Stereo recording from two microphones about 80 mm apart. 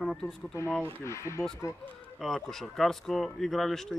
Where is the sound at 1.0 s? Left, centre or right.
Left.